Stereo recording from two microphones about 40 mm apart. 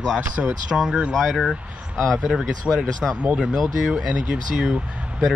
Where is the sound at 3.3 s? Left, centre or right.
Centre.